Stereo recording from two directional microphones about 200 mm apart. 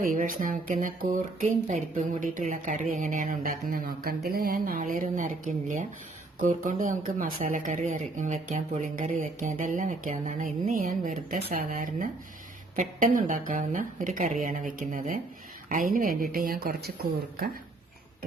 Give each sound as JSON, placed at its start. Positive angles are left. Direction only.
{"t": 0.0, "sound": "speech", "side_deg": -45}